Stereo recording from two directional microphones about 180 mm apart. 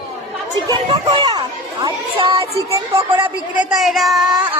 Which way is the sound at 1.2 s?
25° right (ahead or behind).